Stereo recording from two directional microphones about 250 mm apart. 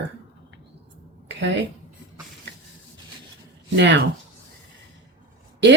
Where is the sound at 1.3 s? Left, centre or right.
Right.